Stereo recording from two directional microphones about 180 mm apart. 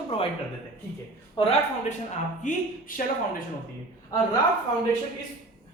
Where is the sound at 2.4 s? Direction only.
45° left (ahead or behind).